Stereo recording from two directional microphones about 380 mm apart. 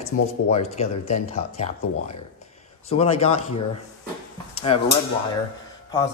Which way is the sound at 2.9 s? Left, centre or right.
Centre.